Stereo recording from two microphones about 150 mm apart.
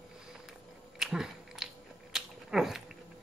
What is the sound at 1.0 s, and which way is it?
Biting, 5° right (ahead or behind).